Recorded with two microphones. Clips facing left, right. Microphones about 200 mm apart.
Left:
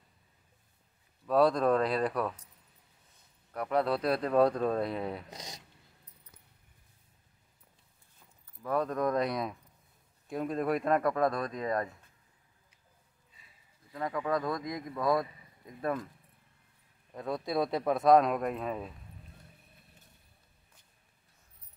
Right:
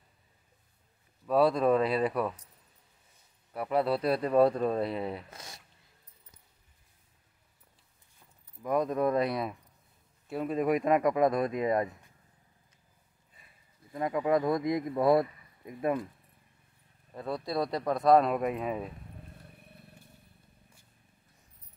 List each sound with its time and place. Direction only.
1.2 s speech: 5° right (ahead or behind)
3.5 s speech: 5° right (ahead or behind)
5.3 s speech: 20° left (ahead or behind)
8.6 s speech: 10° right (ahead or behind)
13.4 s a sound: 55° right (ahead or behind)
13.9 s speech: 20° right (ahead or behind)
15.8 s speech: 15° right (ahead or behind)
17.1 s speech: centre (ahead or behind)